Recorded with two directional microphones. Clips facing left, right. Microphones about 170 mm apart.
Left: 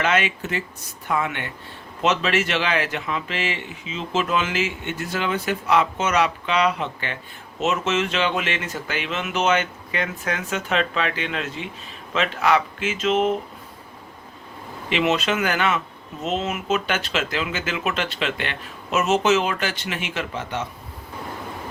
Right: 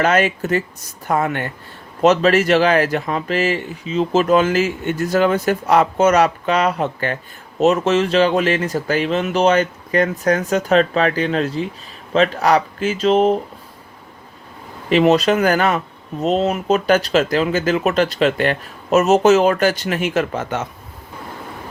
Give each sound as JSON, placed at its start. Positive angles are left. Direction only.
{"t": 0.0, "sound": "speech", "side_deg": -40}
{"t": 14.8, "sound": "speech", "side_deg": -40}